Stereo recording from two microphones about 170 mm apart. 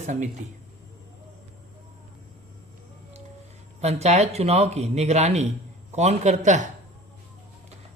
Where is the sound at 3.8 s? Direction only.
40° right (ahead or behind).